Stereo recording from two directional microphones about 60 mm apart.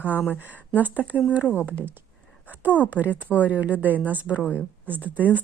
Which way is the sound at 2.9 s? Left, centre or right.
Right.